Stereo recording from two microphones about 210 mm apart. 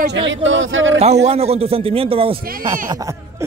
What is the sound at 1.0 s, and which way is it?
A man's voice, 30° right (ahead or behind).